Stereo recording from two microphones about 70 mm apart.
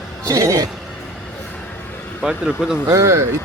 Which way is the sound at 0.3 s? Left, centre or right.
Right.